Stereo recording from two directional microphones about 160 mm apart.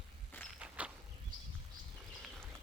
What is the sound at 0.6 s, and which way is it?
Insect, 10° right (ahead or behind).